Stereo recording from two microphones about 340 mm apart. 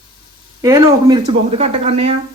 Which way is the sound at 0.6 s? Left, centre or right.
Centre.